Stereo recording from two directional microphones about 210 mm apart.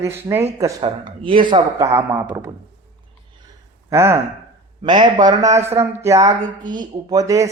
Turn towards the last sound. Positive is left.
turn(degrees=-15)  # may be behind; listen again after turning